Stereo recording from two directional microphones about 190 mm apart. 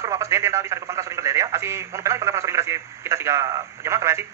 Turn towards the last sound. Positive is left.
turn(degrees=-15)  # may be behind; listen again after turning